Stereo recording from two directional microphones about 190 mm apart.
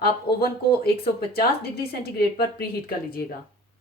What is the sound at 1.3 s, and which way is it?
Speech, 55° left (ahead or behind).